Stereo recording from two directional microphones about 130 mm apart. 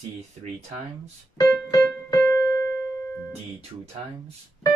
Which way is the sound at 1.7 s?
20° left (ahead or behind).